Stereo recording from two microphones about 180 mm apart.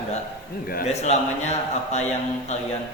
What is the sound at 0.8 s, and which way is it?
A man's voice, 40° left (ahead or behind).